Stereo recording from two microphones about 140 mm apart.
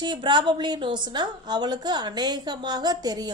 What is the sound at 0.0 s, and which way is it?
A woman's voice, 35° right (ahead or behind).